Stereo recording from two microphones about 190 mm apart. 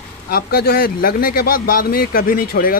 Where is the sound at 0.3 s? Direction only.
55° left (ahead or behind).